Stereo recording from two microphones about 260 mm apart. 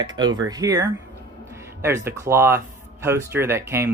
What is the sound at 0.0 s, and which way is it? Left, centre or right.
Speech, centre.